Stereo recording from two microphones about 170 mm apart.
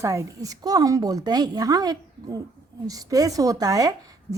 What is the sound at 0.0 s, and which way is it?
A woman's voice, 15° right (ahead or behind).